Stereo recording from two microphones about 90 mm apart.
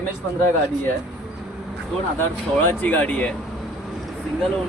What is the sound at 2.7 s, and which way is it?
Speech, 15° left (ahead or behind).